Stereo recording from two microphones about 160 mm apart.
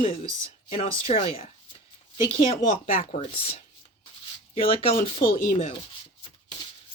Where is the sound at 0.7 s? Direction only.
35° left (ahead or behind).